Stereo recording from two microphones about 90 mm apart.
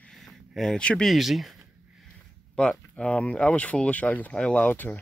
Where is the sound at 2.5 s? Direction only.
10° left (ahead or behind).